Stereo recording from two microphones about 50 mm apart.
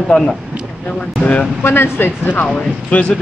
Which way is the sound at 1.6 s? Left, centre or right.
Left.